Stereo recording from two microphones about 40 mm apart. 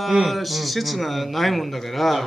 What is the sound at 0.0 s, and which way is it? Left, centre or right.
Speech, centre.